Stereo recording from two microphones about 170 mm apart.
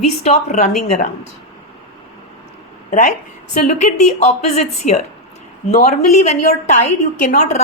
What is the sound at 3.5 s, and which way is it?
A woman's voice, 45° left (ahead or behind).